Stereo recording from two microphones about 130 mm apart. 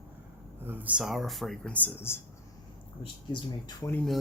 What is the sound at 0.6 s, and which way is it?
Speech, 15° right (ahead or behind).